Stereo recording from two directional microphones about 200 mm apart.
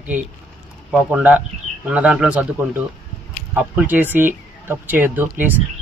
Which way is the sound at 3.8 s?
10° right (ahead or behind).